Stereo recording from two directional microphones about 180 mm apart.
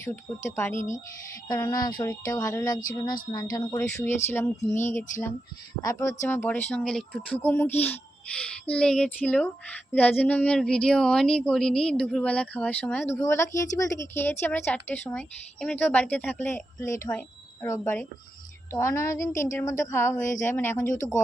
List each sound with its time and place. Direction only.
0.0 s speech: 15° left (ahead or behind)
5.8 s speech: 15° left (ahead or behind)
20.8 s speech: 45° left (ahead or behind)